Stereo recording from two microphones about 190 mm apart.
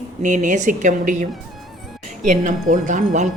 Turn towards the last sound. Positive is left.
turn(degrees=-40)  # may be behind; listen again after turning